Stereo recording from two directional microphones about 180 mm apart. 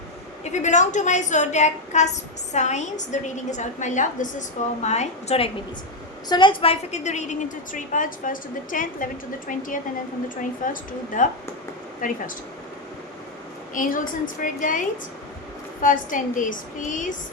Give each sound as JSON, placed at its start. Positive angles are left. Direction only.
{"t": 0.4, "sound": "a woman's voice", "side_deg": 40}
{"t": 6.2, "sound": "a woman's voice", "side_deg": 25}
{"t": 13.7, "sound": "a woman's voice", "side_deg": 50}